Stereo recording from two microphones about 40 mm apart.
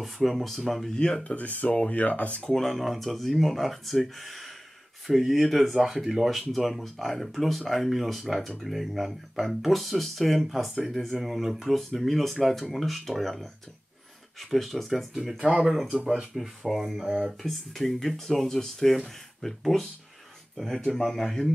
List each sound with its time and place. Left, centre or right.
0.0 s speech: centre
1.2 s speech: left
2.5 s speech: centre
15.5 s speech: right
16.1 s speech: centre